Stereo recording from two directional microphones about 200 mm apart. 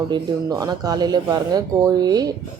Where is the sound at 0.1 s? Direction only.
20° right (ahead or behind).